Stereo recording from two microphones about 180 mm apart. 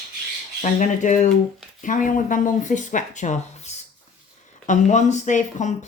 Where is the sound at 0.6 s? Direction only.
45° left (ahead or behind).